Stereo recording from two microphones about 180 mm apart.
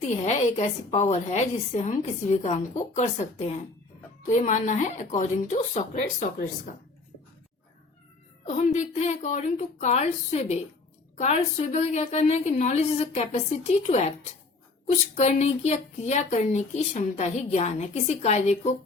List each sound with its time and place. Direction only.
0.0 s a woman's voice: 40° left (ahead or behind)
8.4 s a woman's voice: 40° left (ahead or behind)
15.1 s a woman's voice: 40° left (ahead or behind)